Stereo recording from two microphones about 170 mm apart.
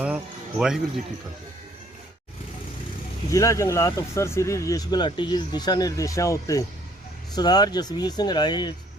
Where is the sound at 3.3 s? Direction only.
20° left (ahead or behind).